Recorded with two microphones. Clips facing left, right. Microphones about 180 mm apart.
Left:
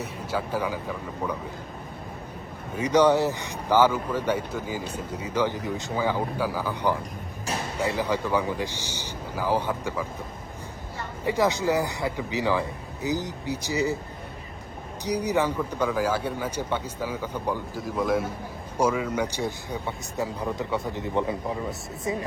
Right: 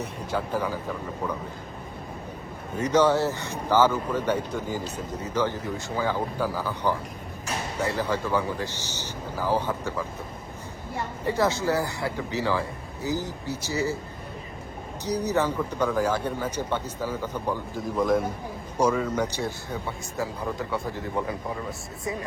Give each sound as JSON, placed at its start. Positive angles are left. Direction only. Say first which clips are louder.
{"t": 0.3, "sound": "speech", "louder": "even", "side_deg": 10}
{"t": 2.7, "sound": "speech", "louder": "left 1 dB", "side_deg": 10}
{"t": 11.3, "sound": "speech", "louder": "left 1 dB", "side_deg": 15}
{"t": 15.0, "sound": "speech", "louder": "even", "side_deg": 10}
{"t": 17.7, "sound": "a man's voice", "louder": "right 3 dB", "side_deg": 0}